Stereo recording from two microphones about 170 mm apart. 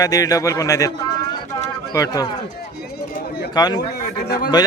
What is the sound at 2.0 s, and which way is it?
Speech, 20° left (ahead or behind).